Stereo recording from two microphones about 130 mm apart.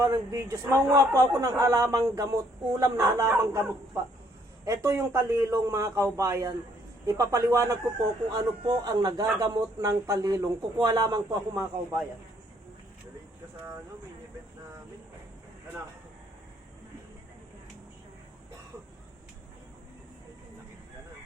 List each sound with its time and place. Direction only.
0.0 s a man's voice: 25° right (ahead or behind)